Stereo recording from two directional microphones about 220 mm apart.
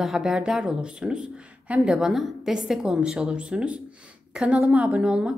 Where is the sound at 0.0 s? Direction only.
Centre (ahead or behind).